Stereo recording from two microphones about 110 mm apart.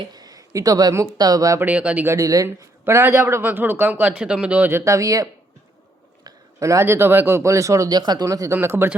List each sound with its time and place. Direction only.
0.0 s speech: 35° right (ahead or behind)
1.6 s speech: 10° right (ahead or behind)
2.0 s speech: 30° right (ahead or behind)
2.8 s speech: 25° right (ahead or behind)
4.8 s speech: 30° right (ahead or behind)